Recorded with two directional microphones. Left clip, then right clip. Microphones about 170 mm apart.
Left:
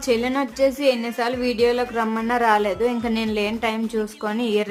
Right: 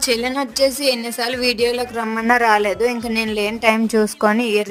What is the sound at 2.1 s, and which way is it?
A woman's voice, 30° right (ahead or behind).